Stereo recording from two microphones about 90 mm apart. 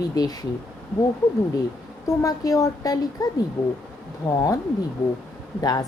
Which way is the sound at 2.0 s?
40° left (ahead or behind).